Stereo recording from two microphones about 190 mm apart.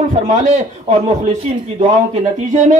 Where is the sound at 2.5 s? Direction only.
40° right (ahead or behind).